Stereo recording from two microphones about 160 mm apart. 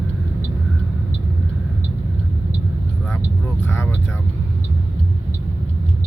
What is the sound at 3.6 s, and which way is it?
Speech, 15° left (ahead or behind).